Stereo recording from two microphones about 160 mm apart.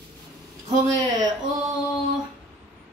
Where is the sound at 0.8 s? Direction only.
20° right (ahead or behind).